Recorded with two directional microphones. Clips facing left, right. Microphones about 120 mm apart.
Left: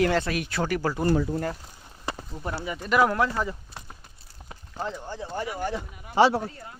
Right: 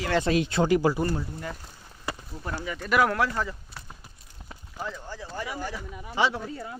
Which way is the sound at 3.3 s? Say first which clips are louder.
Left 2 dB; 20° left (ahead or behind).